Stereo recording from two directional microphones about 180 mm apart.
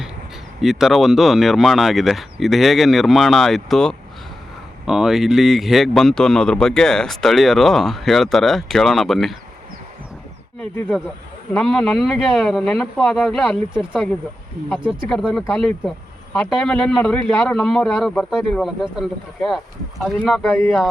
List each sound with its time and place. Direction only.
0.6 s speech: centre (ahead or behind)
10.6 s speech: 5° left (ahead or behind)